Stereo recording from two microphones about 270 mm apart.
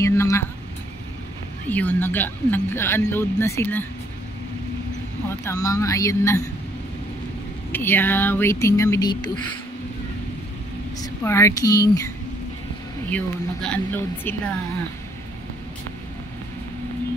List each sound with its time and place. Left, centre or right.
0.0 s speech: centre
1.7 s speech: centre
5.4 s speech: centre
7.7 s speech: centre
11.0 s speech: centre
13.1 s speech: centre